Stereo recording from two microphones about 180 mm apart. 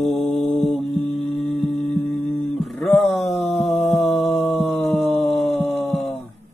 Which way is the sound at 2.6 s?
Centre (ahead or behind).